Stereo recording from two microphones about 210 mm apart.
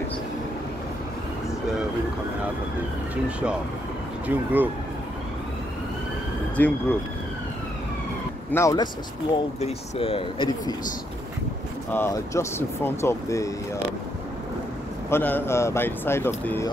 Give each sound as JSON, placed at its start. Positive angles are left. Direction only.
{"t": 3.3, "sound": "speech", "side_deg": -5}
{"t": 6.5, "sound": "speech", "side_deg": 10}
{"t": 8.5, "sound": "speech", "side_deg": 15}
{"t": 9.6, "sound": "speech", "side_deg": 30}
{"t": 11.9, "sound": "speech", "side_deg": 10}
{"t": 15.0, "sound": "speech", "side_deg": 10}